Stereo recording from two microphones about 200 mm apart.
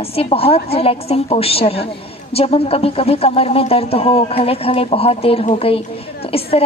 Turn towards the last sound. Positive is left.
turn(degrees=30)  # may be behind; listen again after turning